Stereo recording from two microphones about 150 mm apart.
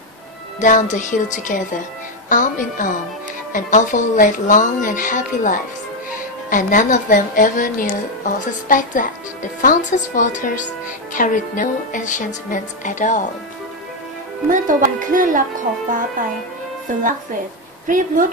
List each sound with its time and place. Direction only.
0.6 s speech: 55° left (ahead or behind)
14.5 s speech: 60° right (ahead or behind)
16.9 s a woman's voice: 60° right (ahead or behind)